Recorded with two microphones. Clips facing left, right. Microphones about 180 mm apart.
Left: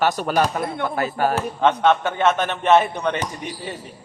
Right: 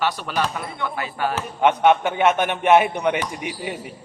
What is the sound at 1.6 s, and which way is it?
A man's voice, 15° right (ahead or behind).